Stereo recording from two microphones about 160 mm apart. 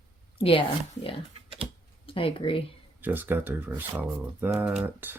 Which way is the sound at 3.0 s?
10° right (ahead or behind).